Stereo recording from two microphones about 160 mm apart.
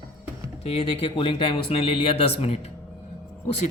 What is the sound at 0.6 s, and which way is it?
Speech, 35° left (ahead or behind).